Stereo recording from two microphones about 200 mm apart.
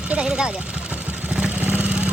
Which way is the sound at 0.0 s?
5° right (ahead or behind).